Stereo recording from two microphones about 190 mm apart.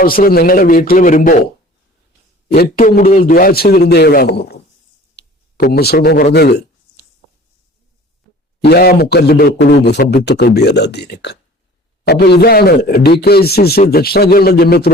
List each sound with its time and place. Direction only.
0.0 s a man's voice: 50° left (ahead or behind)
2.5 s a man's voice: 50° left (ahead or behind)
5.2 s a sound: 65° left (ahead or behind)
5.6 s a man's voice: 55° left (ahead or behind)
8.6 s a man's voice: 55° left (ahead or behind)